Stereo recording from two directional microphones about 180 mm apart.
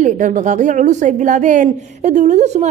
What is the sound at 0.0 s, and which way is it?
A woman's voice, 45° right (ahead or behind).